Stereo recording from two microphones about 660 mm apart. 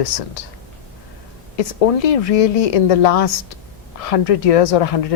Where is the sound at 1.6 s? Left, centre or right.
Left.